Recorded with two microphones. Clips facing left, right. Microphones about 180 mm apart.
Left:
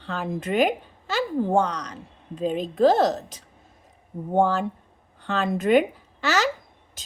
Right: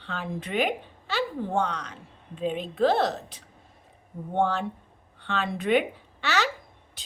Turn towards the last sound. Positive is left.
turn(degrees=40)  # may be behind; listen again after turning